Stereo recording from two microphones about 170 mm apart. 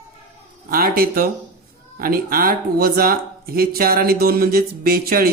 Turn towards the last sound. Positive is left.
turn(degrees=-60)  # may be behind; listen again after turning